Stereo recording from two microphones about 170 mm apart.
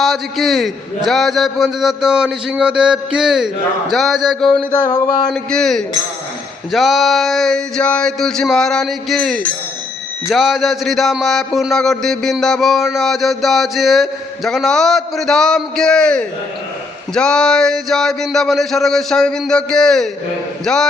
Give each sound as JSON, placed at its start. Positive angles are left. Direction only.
{"t": 0.0, "sound": "a man's voice", "side_deg": 0}
{"t": 4.5, "sound": "a sound", "side_deg": 25}
{"t": 5.3, "sound": "a man's voice", "side_deg": 5}